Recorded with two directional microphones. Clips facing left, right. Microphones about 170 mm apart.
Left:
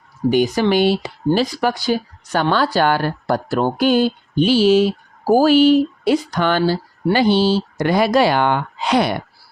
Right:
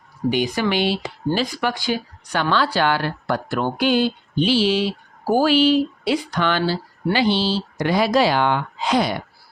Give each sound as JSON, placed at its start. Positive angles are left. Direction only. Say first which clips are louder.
{"t": 0.3, "sound": "speech", "louder": "left 5 dB", "side_deg": 45}